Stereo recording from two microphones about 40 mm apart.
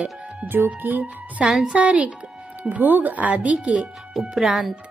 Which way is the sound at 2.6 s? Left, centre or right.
Right.